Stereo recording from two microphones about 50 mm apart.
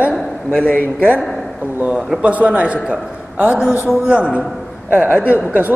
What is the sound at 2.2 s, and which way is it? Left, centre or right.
Speech, right.